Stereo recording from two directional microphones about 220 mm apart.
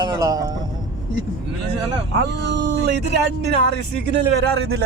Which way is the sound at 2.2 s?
50° right (ahead or behind).